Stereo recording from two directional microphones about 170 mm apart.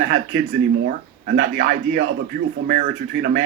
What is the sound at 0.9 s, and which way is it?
A man's voice, 65° right (ahead or behind).